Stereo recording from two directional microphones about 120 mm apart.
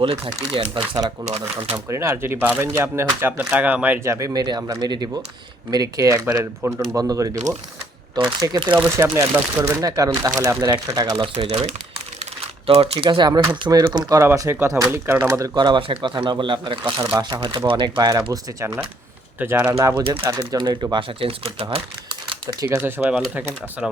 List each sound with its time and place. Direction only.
0.5 s speech: 45° right (ahead or behind)
1.2 s speech: 60° right (ahead or behind)
1.7 s speech: 20° right (ahead or behind)
11.3 s speech: 60° right (ahead or behind)
13.1 s speech: 40° right (ahead or behind)
14.2 s speech: 25° right (ahead or behind)
19.4 s speech: 20° right (ahead or behind)
20.5 s speech: 35° right (ahead or behind)
20.9 s speech: 50° right (ahead or behind)
22.6 s speech: 20° right (ahead or behind)